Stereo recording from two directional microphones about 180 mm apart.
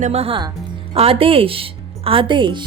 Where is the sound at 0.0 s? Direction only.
35° right (ahead or behind).